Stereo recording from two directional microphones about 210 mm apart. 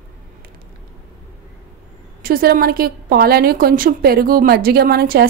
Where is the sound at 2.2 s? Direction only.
45° right (ahead or behind).